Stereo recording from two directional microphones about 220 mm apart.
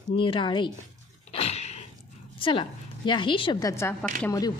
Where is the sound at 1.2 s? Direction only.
30° left (ahead or behind).